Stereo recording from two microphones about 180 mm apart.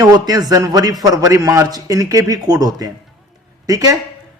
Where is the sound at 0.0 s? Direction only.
20° right (ahead or behind).